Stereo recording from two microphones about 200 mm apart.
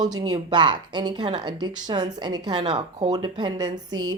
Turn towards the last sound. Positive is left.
turn(degrees=-20)  # may be behind; listen again after turning